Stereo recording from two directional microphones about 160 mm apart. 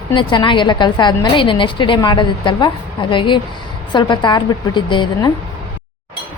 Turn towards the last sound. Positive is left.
turn(degrees=25)  # may be behind; listen again after turning